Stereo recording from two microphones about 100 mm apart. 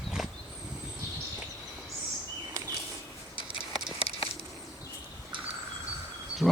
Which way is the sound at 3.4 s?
45° right (ahead or behind).